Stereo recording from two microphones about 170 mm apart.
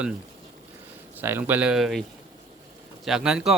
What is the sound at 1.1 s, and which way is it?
Speech, 10° right (ahead or behind).